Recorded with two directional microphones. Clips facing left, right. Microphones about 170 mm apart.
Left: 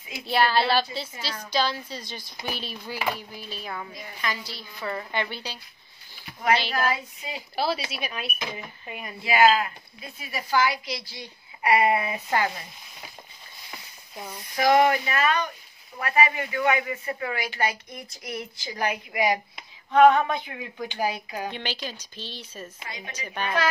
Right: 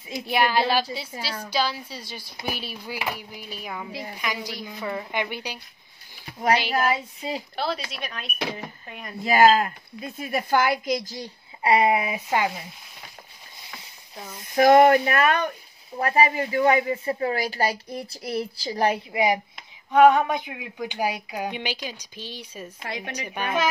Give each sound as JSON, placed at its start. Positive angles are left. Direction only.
{"t": 0.3, "sound": "speech", "side_deg": -15}
{"t": 7.2, "sound": "speech", "side_deg": -30}
{"t": 7.5, "sound": "a woman's voice", "side_deg": 5}
{"t": 9.2, "sound": "speech", "side_deg": -45}
{"t": 11.6, "sound": "speech", "side_deg": -20}
{"t": 14.5, "sound": "speech", "side_deg": -50}
{"t": 16.0, "sound": "speech", "side_deg": -35}
{"t": 19.9, "sound": "speech", "side_deg": -15}
{"t": 22.8, "sound": "a woman's voice", "side_deg": -70}
{"t": 23.1, "sound": "speech", "side_deg": -10}